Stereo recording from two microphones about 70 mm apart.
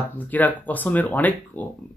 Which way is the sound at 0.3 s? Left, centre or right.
Left.